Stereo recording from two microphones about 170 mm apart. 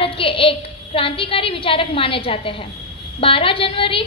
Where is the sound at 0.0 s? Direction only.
30° left (ahead or behind).